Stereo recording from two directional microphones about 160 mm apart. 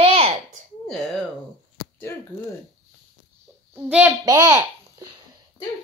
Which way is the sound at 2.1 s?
15° left (ahead or behind).